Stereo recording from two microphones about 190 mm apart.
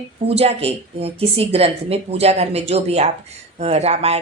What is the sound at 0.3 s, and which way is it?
A woman's voice, 30° right (ahead or behind).